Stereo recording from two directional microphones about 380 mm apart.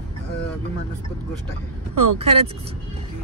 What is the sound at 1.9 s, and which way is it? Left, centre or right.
Speech, right.